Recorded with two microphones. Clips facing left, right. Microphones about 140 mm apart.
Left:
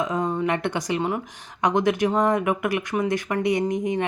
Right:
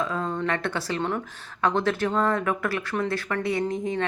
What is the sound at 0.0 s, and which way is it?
Speech, 15° left (ahead or behind).